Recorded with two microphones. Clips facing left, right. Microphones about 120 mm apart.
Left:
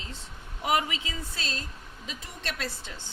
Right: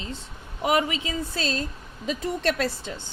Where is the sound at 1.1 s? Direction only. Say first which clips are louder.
Right 9 dB; 40° right (ahead or behind).